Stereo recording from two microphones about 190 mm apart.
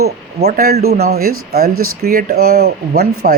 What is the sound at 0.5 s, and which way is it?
Speech, 55° right (ahead or behind).